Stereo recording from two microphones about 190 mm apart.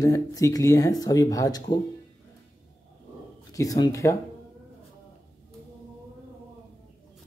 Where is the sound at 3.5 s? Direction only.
20° left (ahead or behind).